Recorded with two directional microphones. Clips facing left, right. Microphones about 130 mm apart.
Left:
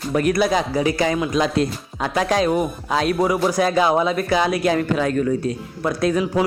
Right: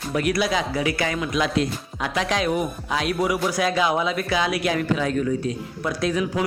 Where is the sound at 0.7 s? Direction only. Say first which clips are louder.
Left 5 dB; 35° left (ahead or behind).